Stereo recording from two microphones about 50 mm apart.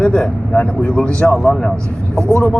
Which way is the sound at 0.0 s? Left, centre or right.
Centre.